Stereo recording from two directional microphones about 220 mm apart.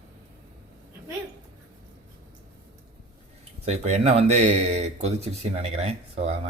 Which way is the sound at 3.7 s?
30° right (ahead or behind).